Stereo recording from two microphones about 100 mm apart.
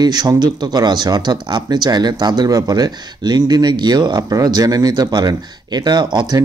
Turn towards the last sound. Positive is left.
turn(degrees=-45)  # may be behind; listen again after turning